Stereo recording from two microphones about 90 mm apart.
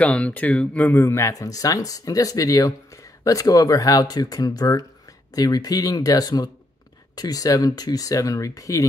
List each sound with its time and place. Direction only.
0.0 s speech: 15° left (ahead or behind); by 8.8 s 35° left (ahead or behind)